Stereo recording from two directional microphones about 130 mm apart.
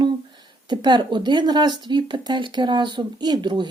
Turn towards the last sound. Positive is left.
turn(degrees=-35)  # may be behind; listen again after turning